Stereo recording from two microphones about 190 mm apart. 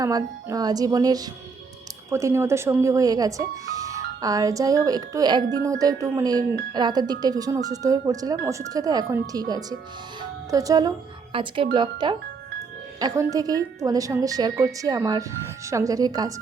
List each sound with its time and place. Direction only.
0.0 s speech: 20° right (ahead or behind)